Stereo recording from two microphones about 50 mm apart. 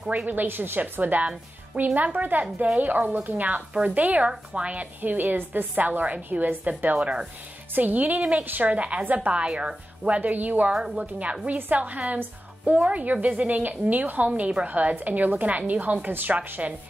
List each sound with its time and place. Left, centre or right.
0.3 s a woman's voice: right
10.7 s a woman's voice: centre; by 16.7 s right